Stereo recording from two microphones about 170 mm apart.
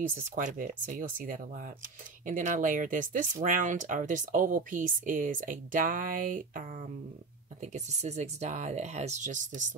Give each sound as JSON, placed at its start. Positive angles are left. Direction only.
{"t": 0.1, "sound": "speech", "side_deg": -50}